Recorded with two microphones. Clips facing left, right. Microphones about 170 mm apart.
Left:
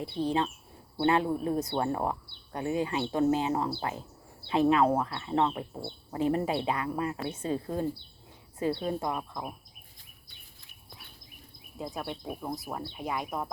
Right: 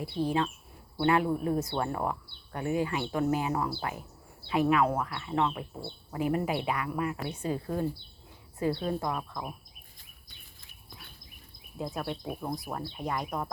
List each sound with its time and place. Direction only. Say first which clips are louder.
0.3 s speech: even; 25° left (ahead or behind)
11.8 s speech: right 2 dB; centre (ahead or behind)